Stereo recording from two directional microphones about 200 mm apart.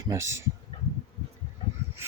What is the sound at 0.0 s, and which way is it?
Speech, 15° right (ahead or behind).